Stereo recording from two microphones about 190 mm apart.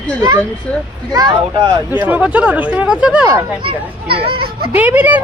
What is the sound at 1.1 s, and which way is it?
Speech, 20° right (ahead or behind).